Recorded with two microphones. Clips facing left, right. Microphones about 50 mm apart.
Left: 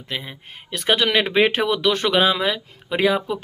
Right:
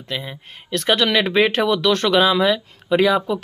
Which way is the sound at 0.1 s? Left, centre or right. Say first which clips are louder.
Right 2 dB; centre.